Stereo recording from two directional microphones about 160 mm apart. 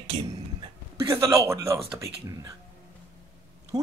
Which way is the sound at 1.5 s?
20° right (ahead or behind).